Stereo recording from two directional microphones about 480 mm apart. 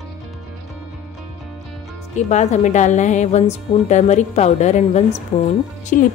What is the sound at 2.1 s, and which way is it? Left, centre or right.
A woman's voice, centre.